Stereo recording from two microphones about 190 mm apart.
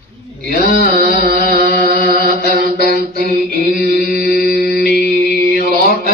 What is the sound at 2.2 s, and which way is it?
Mantra, 50° right (ahead or behind).